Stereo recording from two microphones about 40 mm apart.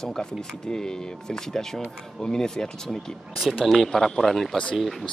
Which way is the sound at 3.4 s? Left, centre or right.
Centre.